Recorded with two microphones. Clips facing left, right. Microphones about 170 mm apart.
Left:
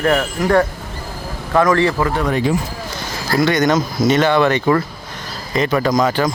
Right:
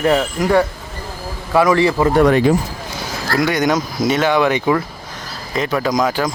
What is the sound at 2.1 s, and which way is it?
Speech, 75° right (ahead or behind).